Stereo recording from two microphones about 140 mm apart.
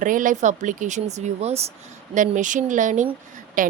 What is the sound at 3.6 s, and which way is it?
Speech, 75° right (ahead or behind).